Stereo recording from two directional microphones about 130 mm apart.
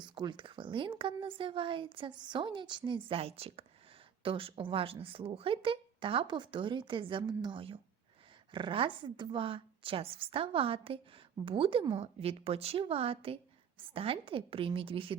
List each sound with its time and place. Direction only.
0.1 s a woman's voice: 35° right (ahead or behind)